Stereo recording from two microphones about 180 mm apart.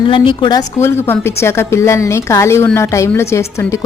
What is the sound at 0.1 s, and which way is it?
Speech, 25° left (ahead or behind).